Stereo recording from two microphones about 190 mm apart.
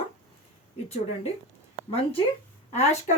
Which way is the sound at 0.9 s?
35° left (ahead or behind).